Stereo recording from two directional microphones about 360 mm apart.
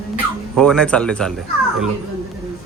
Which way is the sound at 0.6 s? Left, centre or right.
Centre.